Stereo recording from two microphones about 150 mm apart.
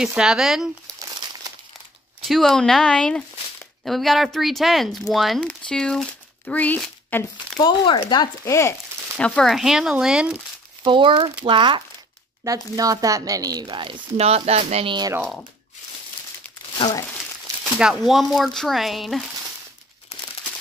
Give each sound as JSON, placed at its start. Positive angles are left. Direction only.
{"t": 0.0, "sound": "speech", "side_deg": -5}
{"t": 2.2, "sound": "speech", "side_deg": 0}
{"t": 7.5, "sound": "speech", "side_deg": 30}
{"t": 9.1, "sound": "speech", "side_deg": 5}
{"t": 10.8, "sound": "speech", "side_deg": -35}
{"t": 12.4, "sound": "speech", "side_deg": -25}
{"t": 16.7, "sound": "speech", "side_deg": 30}
{"t": 17.7, "sound": "speech", "side_deg": -5}